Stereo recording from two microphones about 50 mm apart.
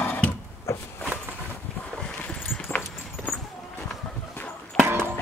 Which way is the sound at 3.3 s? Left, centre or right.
Left.